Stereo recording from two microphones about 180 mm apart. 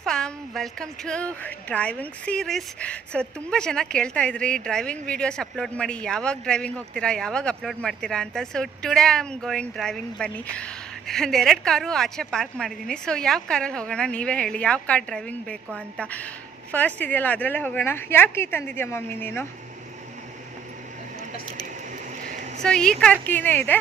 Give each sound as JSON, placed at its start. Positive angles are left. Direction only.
{"t": 0.0, "sound": "a woman's voice", "side_deg": 5}
{"t": 21.9, "sound": "a sound", "side_deg": -45}
{"t": 22.6, "sound": "a woman's voice", "side_deg": 5}